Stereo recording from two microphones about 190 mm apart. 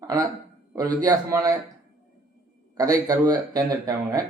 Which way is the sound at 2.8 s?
20° right (ahead or behind).